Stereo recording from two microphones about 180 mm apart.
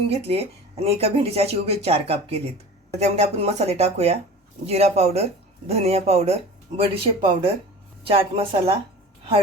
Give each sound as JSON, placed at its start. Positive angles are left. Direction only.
{"t": 0.1, "sound": "speech", "side_deg": -35}